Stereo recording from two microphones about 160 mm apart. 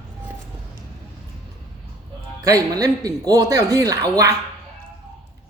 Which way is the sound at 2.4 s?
20° right (ahead or behind).